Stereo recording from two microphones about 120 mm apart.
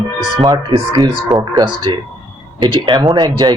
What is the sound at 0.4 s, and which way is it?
Speech, 40° right (ahead or behind).